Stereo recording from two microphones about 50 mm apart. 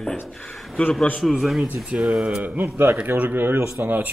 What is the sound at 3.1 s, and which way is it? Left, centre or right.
Speech, right.